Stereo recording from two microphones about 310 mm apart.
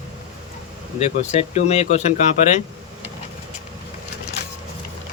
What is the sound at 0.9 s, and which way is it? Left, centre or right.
Speech, left.